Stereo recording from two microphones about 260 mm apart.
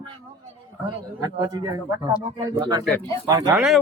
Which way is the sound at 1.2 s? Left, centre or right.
Centre.